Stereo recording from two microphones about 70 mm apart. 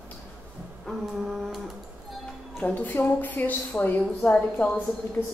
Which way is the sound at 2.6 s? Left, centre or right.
Left.